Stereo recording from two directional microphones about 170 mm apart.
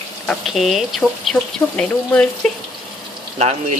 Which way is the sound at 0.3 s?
Centre (ahead or behind).